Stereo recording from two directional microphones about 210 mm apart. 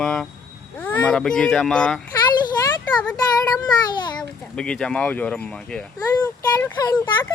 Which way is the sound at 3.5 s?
20° left (ahead or behind).